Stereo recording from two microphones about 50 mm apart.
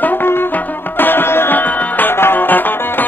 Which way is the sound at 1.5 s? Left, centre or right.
Left.